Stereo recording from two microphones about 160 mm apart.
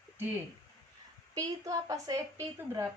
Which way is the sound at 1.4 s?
20° right (ahead or behind).